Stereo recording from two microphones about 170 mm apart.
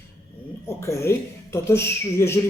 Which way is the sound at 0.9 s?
15° left (ahead or behind).